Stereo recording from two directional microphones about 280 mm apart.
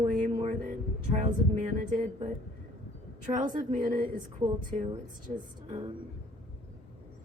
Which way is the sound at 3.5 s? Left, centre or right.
Right.